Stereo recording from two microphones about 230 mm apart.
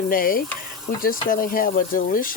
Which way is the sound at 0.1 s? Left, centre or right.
Left.